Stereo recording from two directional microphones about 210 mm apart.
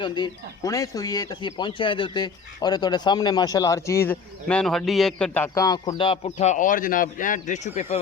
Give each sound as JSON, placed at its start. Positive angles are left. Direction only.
{"t": 0.0, "sound": "speech", "side_deg": 20}